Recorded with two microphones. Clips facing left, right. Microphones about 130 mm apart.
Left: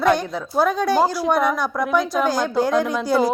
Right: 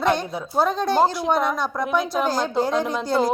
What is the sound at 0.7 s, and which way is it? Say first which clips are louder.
A woman's voice: even; 5° left (ahead or behind).